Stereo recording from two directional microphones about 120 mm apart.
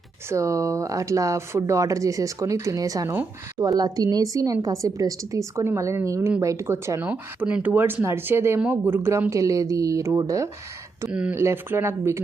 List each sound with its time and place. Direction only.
0.3 s speech: 25° right (ahead or behind)
7.1 s speech: 10° right (ahead or behind); by 10.5 s 25° right (ahead or behind)
11.1 s speech: 10° right (ahead or behind)
11.3 s speech: 20° right (ahead or behind)